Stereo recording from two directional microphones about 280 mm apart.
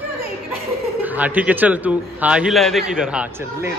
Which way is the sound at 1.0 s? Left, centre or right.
Centre.